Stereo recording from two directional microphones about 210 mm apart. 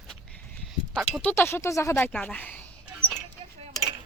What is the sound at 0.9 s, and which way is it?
Speech, 5° left (ahead or behind).